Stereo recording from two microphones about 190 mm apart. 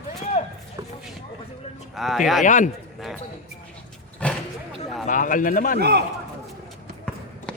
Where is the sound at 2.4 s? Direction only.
45° left (ahead or behind).